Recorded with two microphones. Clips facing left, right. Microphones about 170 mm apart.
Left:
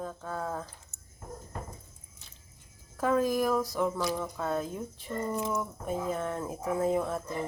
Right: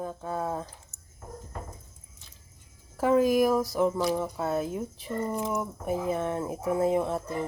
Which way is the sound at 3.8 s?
20° right (ahead or behind).